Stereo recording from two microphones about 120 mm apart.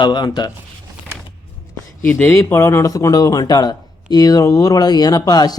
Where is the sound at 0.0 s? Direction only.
40° left (ahead or behind).